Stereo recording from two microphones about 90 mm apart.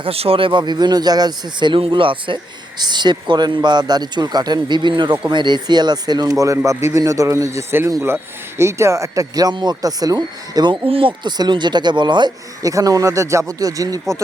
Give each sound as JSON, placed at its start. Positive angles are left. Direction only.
{"t": 0.0, "sound": "speech", "side_deg": -90}
{"t": 0.6, "sound": "speech", "side_deg": -50}
{"t": 6.7, "sound": "a man's voice", "side_deg": -30}
{"t": 10.8, "sound": "speech", "side_deg": -85}
{"t": 11.3, "sound": "speech", "side_deg": -55}
{"t": 12.6, "sound": "a man's voice", "side_deg": -40}